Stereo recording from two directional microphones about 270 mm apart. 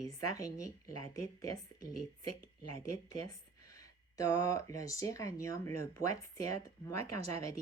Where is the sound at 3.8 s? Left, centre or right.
Centre.